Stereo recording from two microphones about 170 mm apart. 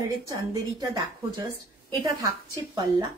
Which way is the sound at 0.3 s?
20° right (ahead or behind).